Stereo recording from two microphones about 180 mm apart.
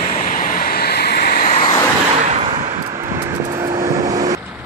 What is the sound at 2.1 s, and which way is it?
Vehicle, 40° right (ahead or behind).